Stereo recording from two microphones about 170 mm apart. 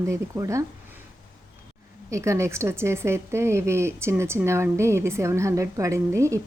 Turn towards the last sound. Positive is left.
turn(degrees=-15)  # may be behind; listen again after turning